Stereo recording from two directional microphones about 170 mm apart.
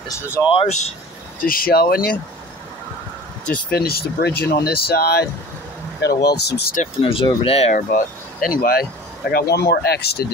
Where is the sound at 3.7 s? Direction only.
65° left (ahead or behind).